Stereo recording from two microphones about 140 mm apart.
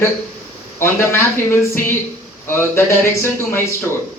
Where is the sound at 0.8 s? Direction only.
15° left (ahead or behind).